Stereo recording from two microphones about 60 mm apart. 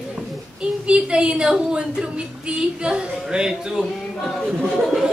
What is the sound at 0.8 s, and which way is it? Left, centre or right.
A woman's voice, centre.